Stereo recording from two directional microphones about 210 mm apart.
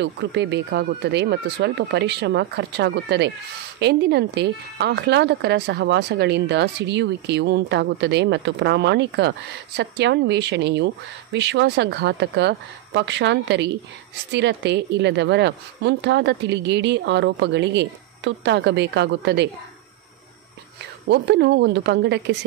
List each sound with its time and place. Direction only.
0.0 s speech: 55° right (ahead or behind)
21.1 s speech: 55° right (ahead or behind)